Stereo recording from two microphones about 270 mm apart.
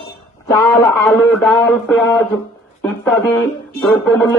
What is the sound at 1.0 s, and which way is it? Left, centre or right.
Speech, centre.